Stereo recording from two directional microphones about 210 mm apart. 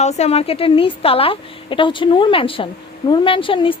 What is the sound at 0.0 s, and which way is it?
A woman's voice, 30° left (ahead or behind).